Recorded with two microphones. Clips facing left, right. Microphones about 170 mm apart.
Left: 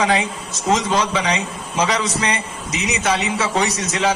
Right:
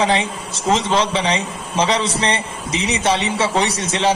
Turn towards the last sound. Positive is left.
turn(degrees=-30)  # may be behind; listen again after turning